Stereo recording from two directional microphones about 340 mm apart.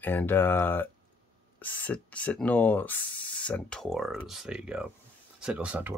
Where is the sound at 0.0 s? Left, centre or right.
Centre.